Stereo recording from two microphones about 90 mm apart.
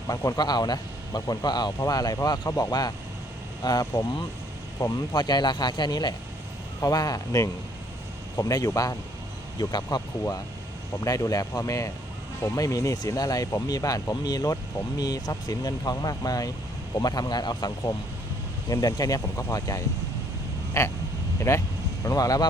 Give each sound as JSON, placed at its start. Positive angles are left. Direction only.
{"t": 0.3, "sound": "speech", "side_deg": 50}
{"t": 5.1, "sound": "speech", "side_deg": 50}
{"t": 11.0, "sound": "speech", "side_deg": 40}